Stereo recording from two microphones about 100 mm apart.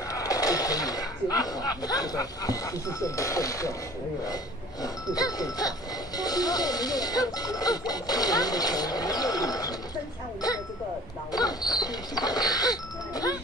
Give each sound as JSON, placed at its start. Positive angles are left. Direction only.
{"t": 0.1, "sound": "speech", "side_deg": 35}
{"t": 4.8, "sound": "speech", "side_deg": 40}
{"t": 11.3, "sound": "a sound", "side_deg": 40}